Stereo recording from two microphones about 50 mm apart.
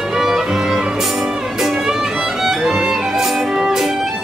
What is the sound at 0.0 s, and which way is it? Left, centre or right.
Music, centre.